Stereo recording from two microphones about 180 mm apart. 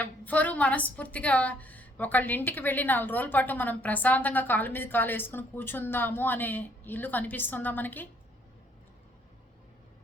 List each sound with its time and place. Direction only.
0.0 s a woman's voice: 10° left (ahead or behind)